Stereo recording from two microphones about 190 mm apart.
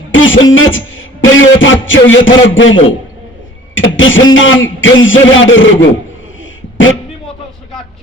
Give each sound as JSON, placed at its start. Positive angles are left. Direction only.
{"t": 0.1, "sound": "beatboxing", "side_deg": 90}
{"t": 0.5, "sound": "music", "side_deg": 90}
{"t": 2.6, "sound": "speech", "side_deg": 90}
{"t": 6.4, "sound": "a sound", "side_deg": 90}